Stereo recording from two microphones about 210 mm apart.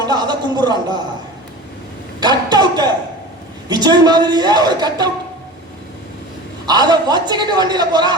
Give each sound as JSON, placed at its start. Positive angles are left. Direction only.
{"t": 0.0, "sound": "a man's voice", "side_deg": -20}
{"t": 2.2, "sound": "vehicle", "side_deg": -20}
{"t": 3.7, "sound": "a woman's voice", "side_deg": -20}
{"t": 6.7, "sound": "a woman's voice", "side_deg": -20}